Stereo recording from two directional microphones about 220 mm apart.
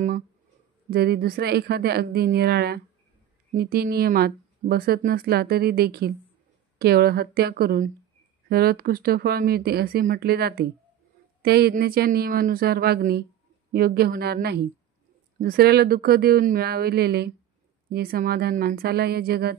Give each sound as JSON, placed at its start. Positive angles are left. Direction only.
{"t": 0.8, "sound": "speech", "side_deg": -45}